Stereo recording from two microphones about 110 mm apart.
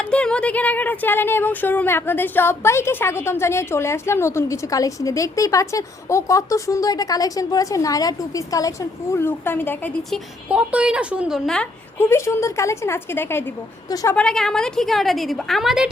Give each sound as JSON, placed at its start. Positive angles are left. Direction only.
{"t": 0.0, "sound": "speech", "side_deg": 10}
{"t": 9.2, "sound": "speech", "side_deg": 20}
{"t": 10.5, "sound": "a woman's voice", "side_deg": -10}
{"t": 11.4, "sound": "a woman's voice", "side_deg": 5}
{"t": 11.9, "sound": "speech", "side_deg": 25}
{"t": 13.9, "sound": "a woman's voice", "side_deg": 30}
{"t": 14.2, "sound": "a woman's voice", "side_deg": 5}